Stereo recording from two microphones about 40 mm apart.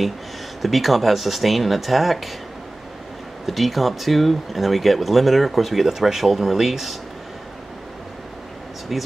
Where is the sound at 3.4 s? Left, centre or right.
Centre.